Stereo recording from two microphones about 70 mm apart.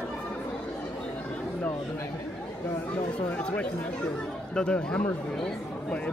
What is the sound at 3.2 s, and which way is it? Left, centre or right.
Speech, centre.